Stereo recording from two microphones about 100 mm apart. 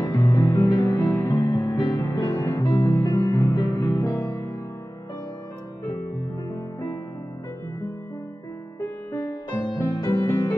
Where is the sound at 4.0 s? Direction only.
35° left (ahead or behind).